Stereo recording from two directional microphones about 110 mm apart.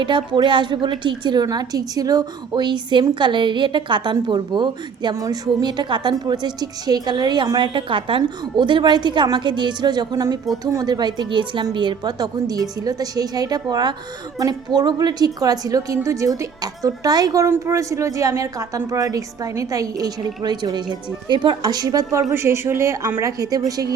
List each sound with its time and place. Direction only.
0.0 s a woman's voice: 45° right (ahead or behind)
5.1 s a woman's voice: 30° right (ahead or behind)